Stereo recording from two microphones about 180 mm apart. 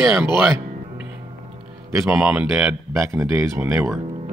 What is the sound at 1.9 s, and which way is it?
Speech, 5° right (ahead or behind).